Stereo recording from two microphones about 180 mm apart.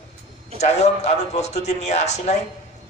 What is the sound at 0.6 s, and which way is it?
A man's voice, 40° left (ahead or behind).